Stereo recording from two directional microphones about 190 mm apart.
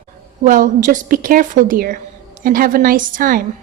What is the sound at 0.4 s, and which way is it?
A woman's voice, 45° right (ahead or behind).